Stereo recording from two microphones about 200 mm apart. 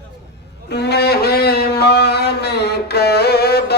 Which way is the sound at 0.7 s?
55° left (ahead or behind).